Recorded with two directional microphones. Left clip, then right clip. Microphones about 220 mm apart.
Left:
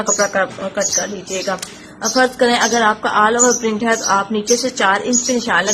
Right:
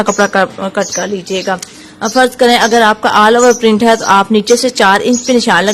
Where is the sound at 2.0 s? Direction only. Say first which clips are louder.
Right 5 dB; 45° right (ahead or behind).